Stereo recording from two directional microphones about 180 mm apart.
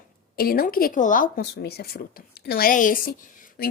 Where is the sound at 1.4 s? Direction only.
65° left (ahead or behind).